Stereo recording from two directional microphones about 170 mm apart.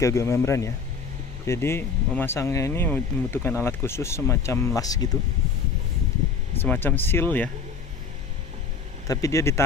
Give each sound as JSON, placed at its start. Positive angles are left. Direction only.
{"t": 0.0, "sound": "speech", "side_deg": 15}
{"t": 6.6, "sound": "speech", "side_deg": 10}
{"t": 9.0, "sound": "speech", "side_deg": 20}